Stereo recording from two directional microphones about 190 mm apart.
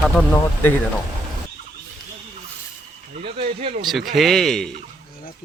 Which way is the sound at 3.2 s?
30° right (ahead or behind).